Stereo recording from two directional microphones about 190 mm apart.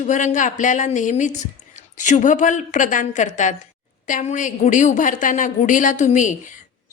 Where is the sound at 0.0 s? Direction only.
40° left (ahead or behind).